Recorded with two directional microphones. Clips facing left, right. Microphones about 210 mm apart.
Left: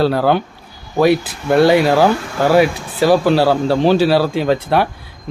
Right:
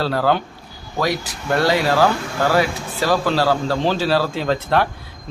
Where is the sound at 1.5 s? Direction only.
15° left (ahead or behind).